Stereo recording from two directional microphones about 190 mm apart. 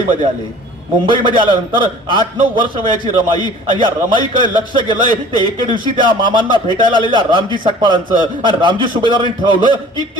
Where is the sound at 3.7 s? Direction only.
25° right (ahead or behind).